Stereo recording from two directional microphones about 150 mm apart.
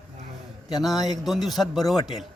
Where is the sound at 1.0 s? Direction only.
Centre (ahead or behind).